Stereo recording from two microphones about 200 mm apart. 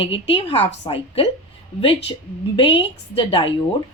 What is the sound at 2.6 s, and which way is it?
Speech, 25° left (ahead or behind).